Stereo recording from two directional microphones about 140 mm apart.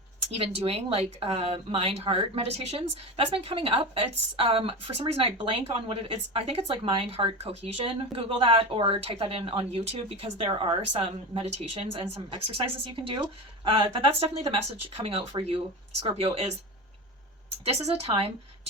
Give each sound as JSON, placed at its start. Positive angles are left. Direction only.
{"t": 0.3, "sound": "speech", "side_deg": -45}
{"t": 13.7, "sound": "speech", "side_deg": -40}
{"t": 17.7, "sound": "speech", "side_deg": -45}